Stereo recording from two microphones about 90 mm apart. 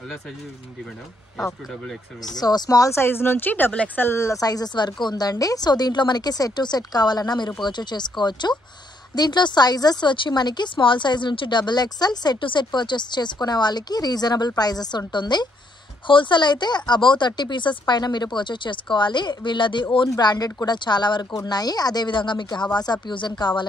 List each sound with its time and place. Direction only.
1.4 s speech: centre (ahead or behind)
2.3 s speech: 50° left (ahead or behind); by 4.1 s 20° left (ahead or behind)
4.1 s speech: 35° left (ahead or behind); by 15.4 s 55° left (ahead or behind)
16.1 s speech: 65° left (ahead or behind)
20.1 s speech: 50° left (ahead or behind)